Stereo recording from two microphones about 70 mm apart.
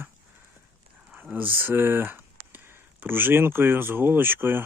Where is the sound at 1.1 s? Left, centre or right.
Centre.